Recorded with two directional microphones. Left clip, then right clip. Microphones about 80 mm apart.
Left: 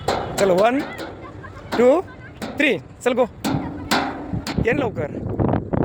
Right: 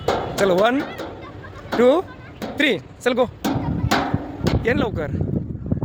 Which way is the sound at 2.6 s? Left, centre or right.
Centre.